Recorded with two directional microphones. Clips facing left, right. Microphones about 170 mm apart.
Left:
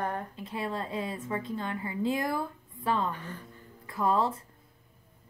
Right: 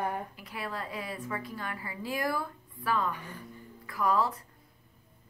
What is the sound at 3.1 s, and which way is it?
Speech, 10° right (ahead or behind).